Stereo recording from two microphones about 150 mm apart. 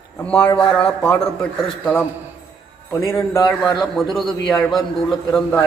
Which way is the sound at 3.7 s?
Centre (ahead or behind).